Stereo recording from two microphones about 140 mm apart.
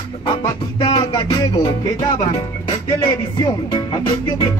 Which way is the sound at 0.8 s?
30° left (ahead or behind).